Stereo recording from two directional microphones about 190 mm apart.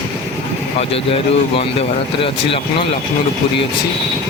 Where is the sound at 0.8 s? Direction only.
30° left (ahead or behind).